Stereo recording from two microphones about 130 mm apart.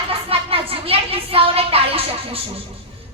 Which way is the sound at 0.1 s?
45° right (ahead or behind).